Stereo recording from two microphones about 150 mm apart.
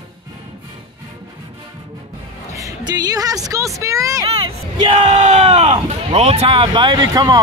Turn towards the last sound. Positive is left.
turn(degrees=-25)  # may be behind; listen again after turning